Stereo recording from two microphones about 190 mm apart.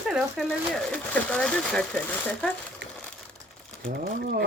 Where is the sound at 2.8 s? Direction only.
65° right (ahead or behind).